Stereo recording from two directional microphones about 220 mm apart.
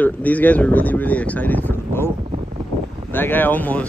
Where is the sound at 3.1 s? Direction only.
10° left (ahead or behind).